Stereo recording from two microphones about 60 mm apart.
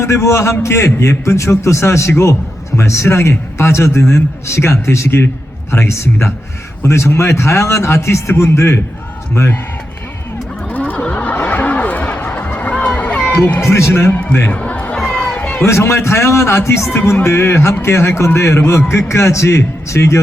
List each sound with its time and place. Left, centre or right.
0.0 s a man's voice: left
10.7 s a sound: left
13.6 s a man's voice: left
13.9 s a man's voice: left
14.5 s a sound: left
15.2 s run: centre
15.6 s a man's voice: left
16.9 s a man's voice: left